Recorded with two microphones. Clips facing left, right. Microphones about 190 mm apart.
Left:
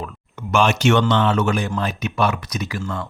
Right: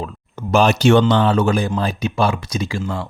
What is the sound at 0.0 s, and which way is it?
Speech, 35° right (ahead or behind).